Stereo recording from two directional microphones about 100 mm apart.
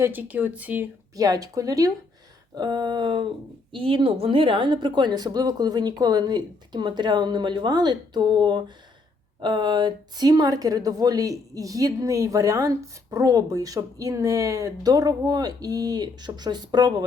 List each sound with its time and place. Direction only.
0.0 s speech: 20° right (ahead or behind)
1.1 s a woman's voice: 35° right (ahead or behind)
3.7 s a woman's voice: 60° right (ahead or behind); by 16.9 s 45° right (ahead or behind)